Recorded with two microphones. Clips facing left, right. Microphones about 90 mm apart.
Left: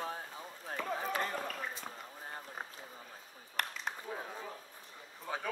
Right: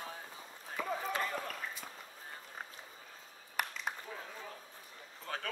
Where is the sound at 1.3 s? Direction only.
5° left (ahead or behind).